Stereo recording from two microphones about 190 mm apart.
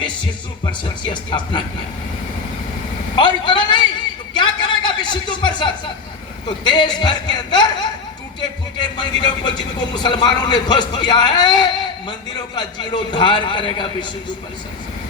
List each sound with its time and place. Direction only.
0.6 s a man's voice: 25° left (ahead or behind)
3.2 s vehicle: 25° left (ahead or behind)
4.4 s a sound: 25° left (ahead or behind)
6.7 s a man's voice: 25° left (ahead or behind)